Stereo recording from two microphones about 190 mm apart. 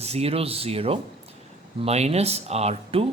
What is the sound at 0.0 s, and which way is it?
A man's voice, 35° right (ahead or behind).